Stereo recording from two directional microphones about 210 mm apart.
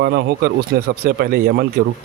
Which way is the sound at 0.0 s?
50° right (ahead or behind).